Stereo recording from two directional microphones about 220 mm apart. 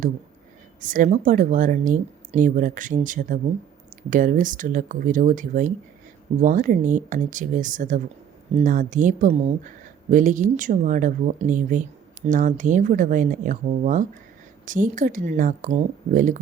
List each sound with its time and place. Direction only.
0.8 s a woman's voice: 35° right (ahead or behind)